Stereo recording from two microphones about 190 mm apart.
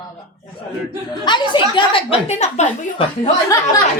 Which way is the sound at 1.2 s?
25° left (ahead or behind).